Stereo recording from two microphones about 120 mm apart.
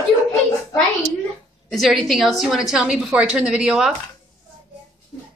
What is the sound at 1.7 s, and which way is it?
A woman's voice, centre (ahead or behind).